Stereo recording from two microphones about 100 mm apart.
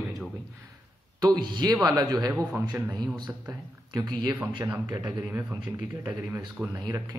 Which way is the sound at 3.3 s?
20° right (ahead or behind).